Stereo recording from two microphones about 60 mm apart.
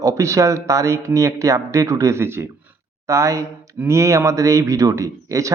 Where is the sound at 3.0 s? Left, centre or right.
Right.